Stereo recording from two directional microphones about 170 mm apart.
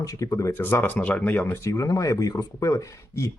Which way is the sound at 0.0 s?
20° left (ahead or behind).